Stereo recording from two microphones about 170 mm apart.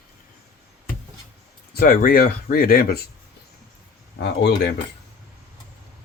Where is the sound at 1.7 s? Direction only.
60° left (ahead or behind).